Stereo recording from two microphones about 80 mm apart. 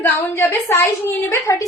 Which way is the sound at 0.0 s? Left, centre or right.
Left.